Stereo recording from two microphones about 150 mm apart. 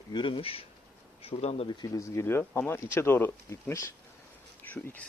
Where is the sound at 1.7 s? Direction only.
25° left (ahead or behind).